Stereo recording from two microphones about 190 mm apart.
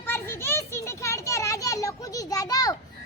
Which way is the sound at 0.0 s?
10° left (ahead or behind).